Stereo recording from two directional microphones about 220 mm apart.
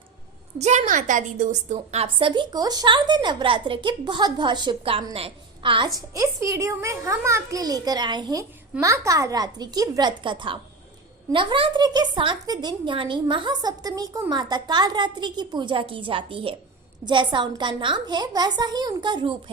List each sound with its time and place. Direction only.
0.6 s a woman's voice: 30° right (ahead or behind)